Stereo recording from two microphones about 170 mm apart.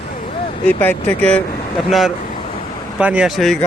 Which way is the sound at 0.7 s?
10° left (ahead or behind).